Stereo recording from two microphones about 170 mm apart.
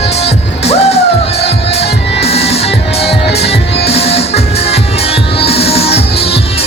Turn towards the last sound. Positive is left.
turn(degrees=35)  # may be behind; listen again after turning